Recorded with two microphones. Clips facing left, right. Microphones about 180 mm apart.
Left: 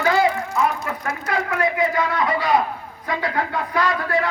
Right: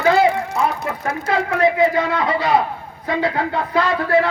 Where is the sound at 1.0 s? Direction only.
30° right (ahead or behind).